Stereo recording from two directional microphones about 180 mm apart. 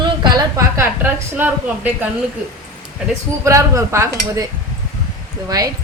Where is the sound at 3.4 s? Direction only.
15° right (ahead or behind).